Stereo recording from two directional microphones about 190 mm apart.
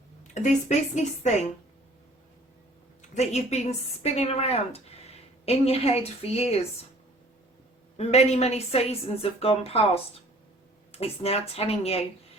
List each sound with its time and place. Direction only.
0.4 s speech: 35° left (ahead or behind)
3.2 s speech: 35° left (ahead or behind)
7.9 s speech: 35° left (ahead or behind)